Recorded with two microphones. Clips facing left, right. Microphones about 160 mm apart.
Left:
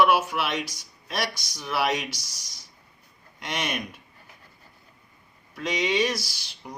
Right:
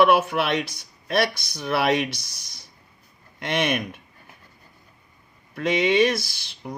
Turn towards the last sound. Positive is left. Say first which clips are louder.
# right 4 dB
turn(degrees=-55)  # may be behind; listen again after turning